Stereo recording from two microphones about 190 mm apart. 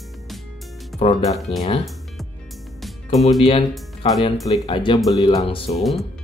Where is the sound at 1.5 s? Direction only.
30° left (ahead or behind).